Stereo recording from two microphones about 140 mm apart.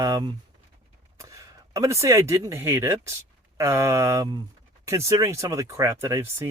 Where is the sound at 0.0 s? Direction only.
30° right (ahead or behind).